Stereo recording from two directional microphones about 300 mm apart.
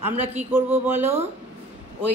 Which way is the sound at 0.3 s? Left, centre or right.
Centre.